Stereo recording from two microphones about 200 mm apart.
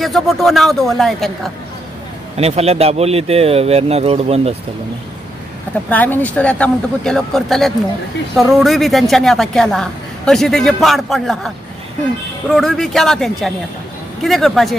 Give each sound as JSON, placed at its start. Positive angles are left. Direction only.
{"t": 0.0, "sound": "speech", "side_deg": 0}
{"t": 2.3, "sound": "speech", "side_deg": -30}
{"t": 5.9, "sound": "speech", "side_deg": 10}